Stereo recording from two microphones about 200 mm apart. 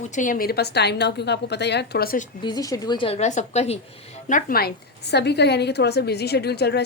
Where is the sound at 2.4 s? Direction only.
20° left (ahead or behind).